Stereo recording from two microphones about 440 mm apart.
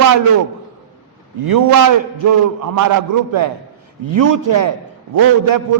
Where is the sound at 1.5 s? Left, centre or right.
Right.